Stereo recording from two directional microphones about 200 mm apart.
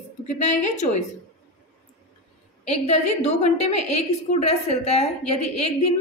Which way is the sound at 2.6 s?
30° left (ahead or behind).